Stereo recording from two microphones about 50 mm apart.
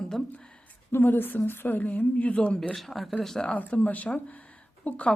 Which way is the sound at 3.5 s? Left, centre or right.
Left.